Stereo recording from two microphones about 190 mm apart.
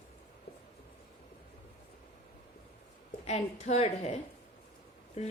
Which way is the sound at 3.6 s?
35° left (ahead or behind).